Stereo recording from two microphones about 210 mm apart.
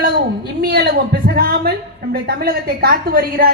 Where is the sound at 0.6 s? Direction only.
50° right (ahead or behind).